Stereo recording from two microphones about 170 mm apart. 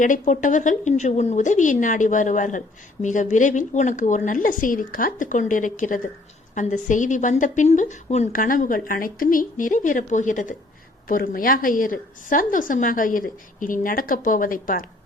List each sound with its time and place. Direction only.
0.0 s a woman's voice: 50° left (ahead or behind)